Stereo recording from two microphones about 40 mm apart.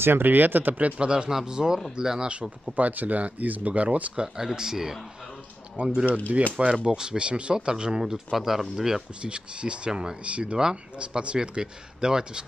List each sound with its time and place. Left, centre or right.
0.0 s speech: right
0.9 s speech: right
2.7 s speech: right
4.1 s speech: centre
5.8 s speech: right
8.3 s speech: centre
9.2 s speech: right